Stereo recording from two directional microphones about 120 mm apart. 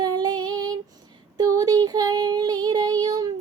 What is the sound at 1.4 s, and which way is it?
Child singing, 30° right (ahead or behind).